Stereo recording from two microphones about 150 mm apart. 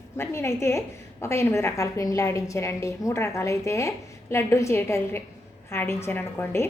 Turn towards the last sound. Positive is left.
turn(degrees=15)  # may be behind; listen again after turning